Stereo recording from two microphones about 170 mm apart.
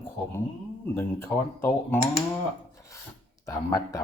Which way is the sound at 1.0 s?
15° left (ahead or behind).